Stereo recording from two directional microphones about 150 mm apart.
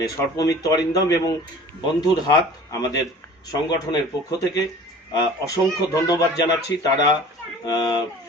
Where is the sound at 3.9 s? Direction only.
25° left (ahead or behind).